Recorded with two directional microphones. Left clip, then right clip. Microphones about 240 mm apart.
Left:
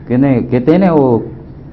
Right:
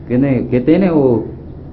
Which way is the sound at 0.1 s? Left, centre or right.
Left.